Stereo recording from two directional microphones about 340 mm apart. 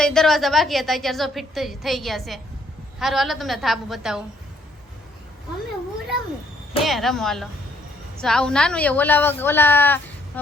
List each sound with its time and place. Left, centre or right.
0.0 s a woman's voice: centre
6.8 s a woman's voice: centre